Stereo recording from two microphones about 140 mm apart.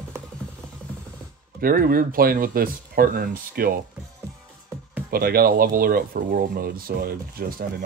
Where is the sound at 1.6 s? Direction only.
90° right.